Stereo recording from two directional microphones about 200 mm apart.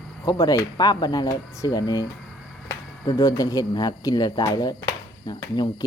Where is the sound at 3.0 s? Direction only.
20° left (ahead or behind).